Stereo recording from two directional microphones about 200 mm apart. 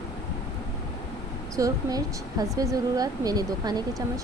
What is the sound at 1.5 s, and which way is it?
A woman's voice, 15° right (ahead or behind).